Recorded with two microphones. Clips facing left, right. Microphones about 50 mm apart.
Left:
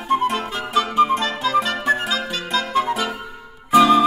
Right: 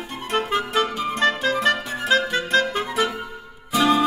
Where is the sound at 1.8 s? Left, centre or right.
Left.